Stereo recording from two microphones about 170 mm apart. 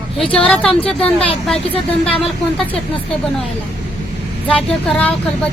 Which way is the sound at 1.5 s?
35° left (ahead or behind).